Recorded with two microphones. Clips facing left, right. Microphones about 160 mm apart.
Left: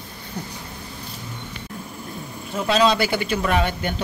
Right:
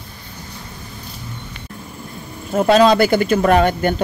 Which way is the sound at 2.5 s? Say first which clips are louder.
Right 7 dB; 50° right (ahead or behind).